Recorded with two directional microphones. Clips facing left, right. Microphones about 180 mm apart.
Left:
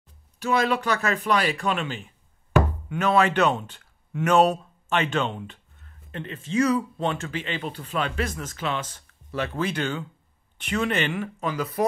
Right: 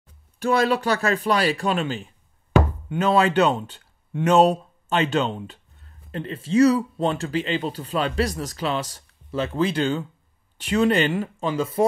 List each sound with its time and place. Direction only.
0.5 s speech: 35° right (ahead or behind)